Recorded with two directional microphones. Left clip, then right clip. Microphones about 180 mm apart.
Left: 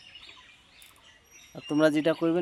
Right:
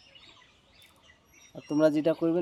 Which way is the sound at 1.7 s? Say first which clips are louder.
Left 1 dB; 5° left (ahead or behind).